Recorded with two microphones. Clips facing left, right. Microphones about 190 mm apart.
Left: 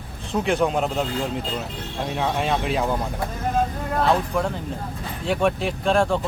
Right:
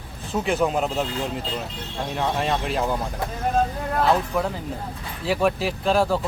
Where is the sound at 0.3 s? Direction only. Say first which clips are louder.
Left 1 dB; centre (ahead or behind).